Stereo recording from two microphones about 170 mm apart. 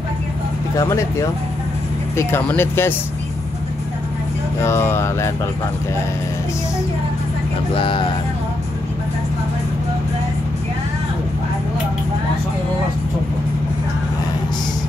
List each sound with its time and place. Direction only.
0.7 s speech: 20° left (ahead or behind)
2.1 s speech: 15° left (ahead or behind)
4.6 s speech: 15° left (ahead or behind)
7.7 s speech: 30° left (ahead or behind)